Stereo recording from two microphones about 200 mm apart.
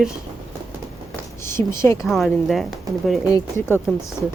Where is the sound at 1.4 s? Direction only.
15° left (ahead or behind).